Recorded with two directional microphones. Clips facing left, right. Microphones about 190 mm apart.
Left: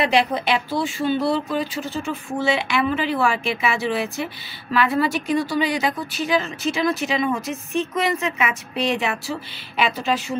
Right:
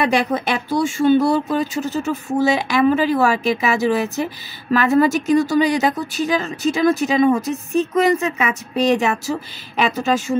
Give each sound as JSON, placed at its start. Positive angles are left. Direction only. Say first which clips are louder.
{"t": 0.0, "sound": "speech", "louder": "right 1 dB", "side_deg": -50}